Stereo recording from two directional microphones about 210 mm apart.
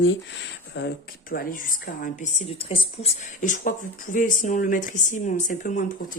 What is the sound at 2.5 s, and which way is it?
Speech, 25° left (ahead or behind).